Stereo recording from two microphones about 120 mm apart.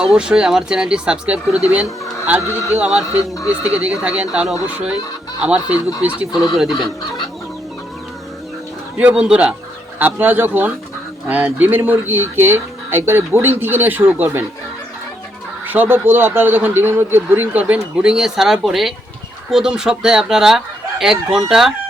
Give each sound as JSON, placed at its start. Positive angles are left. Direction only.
{"t": 0.0, "sound": "a man's voice", "side_deg": -5}
{"t": 2.4, "sound": "speech", "side_deg": 25}
{"t": 2.7, "sound": "a man's voice", "side_deg": -10}
{"t": 3.2, "sound": "speech", "side_deg": 30}
{"t": 3.6, "sound": "a man's voice", "side_deg": -10}
{"t": 9.0, "sound": "a man's voice", "side_deg": -10}
{"t": 15.6, "sound": "a man's voice", "side_deg": -15}